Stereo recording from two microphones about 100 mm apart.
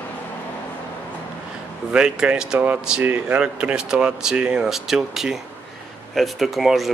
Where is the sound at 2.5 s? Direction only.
20° right (ahead or behind).